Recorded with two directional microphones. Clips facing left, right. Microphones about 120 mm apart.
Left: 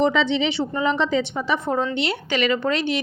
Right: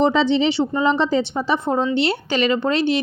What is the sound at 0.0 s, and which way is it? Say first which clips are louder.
A woman's voice: right 3 dB; 35° right (ahead or behind).